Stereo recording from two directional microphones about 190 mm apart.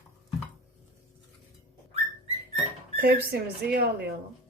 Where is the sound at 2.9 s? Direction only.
55° right (ahead or behind).